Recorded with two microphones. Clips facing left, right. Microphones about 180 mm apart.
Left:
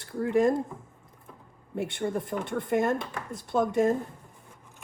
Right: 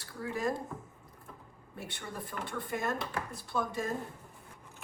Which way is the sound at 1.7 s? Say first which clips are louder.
Left 14 dB; 55° left (ahead or behind).